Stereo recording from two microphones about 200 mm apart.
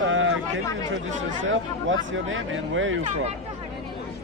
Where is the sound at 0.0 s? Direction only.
75° right (ahead or behind).